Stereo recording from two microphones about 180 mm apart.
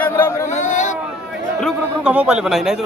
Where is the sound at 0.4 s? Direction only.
40° left (ahead or behind).